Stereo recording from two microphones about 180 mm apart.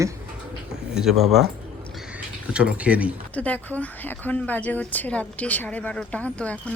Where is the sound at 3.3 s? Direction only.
10° left (ahead or behind).